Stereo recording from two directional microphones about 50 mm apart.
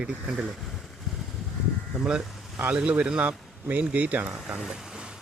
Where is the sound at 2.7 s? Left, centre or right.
Right.